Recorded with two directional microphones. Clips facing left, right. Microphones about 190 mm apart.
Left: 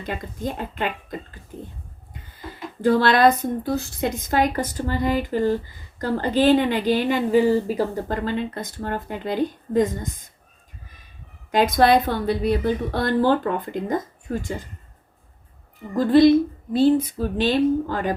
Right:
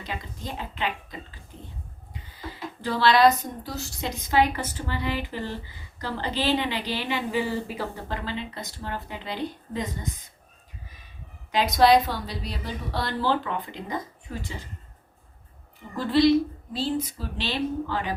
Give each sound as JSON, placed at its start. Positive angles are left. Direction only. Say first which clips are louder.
{"t": 0.0, "sound": "speech", "louder": "left 7 dB", "side_deg": 50}
{"t": 2.5, "sound": "speech", "louder": "left 11 dB", "side_deg": 50}
{"t": 11.5, "sound": "speech", "louder": "left 2 dB", "side_deg": 50}
{"t": 16.0, "sound": "speech", "louder": "left 6 dB", "side_deg": 50}